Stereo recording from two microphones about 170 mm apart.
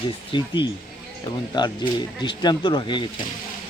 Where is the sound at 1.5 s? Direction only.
25° left (ahead or behind).